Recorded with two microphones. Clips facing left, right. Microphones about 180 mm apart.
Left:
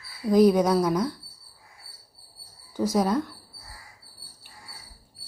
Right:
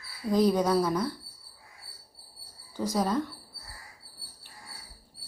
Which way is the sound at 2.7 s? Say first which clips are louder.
Left 4 dB; 10° left (ahead or behind).